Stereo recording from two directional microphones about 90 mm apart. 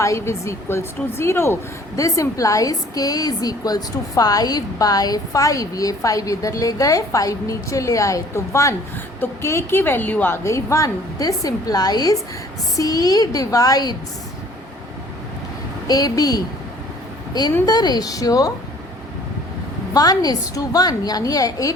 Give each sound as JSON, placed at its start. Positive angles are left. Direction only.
{"t": 0.0, "sound": "a woman's voice", "side_deg": 35}
{"t": 15.9, "sound": "a woman's voice", "side_deg": 45}
{"t": 19.9, "sound": "a woman's voice", "side_deg": 45}